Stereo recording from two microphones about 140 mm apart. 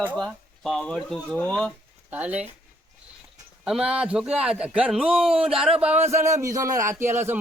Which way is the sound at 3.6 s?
5° right (ahead or behind).